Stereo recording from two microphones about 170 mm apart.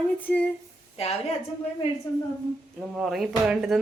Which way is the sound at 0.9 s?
35° left (ahead or behind).